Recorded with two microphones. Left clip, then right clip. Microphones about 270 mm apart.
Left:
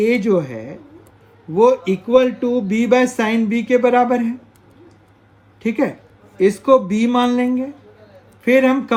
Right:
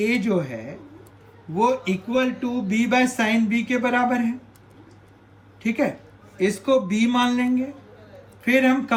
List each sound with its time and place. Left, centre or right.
0.0 s speech: left
5.6 s speech: centre